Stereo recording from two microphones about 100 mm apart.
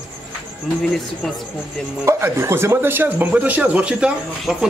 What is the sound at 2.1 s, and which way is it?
Speech, 30° right (ahead or behind).